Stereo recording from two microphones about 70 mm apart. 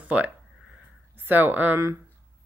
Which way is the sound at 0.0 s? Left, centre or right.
Right.